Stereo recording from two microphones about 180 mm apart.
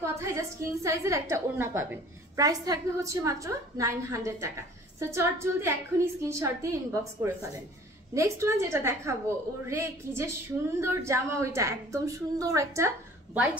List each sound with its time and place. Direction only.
0.0 s a woman's voice: 15° right (ahead or behind)